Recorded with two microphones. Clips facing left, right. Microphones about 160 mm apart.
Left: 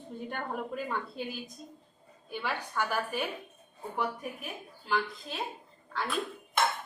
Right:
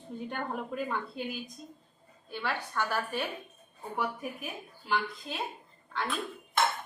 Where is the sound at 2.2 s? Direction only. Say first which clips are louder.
Even; 10° left (ahead or behind).